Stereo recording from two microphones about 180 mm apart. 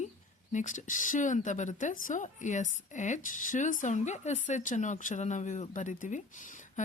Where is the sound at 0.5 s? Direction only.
45° left (ahead or behind).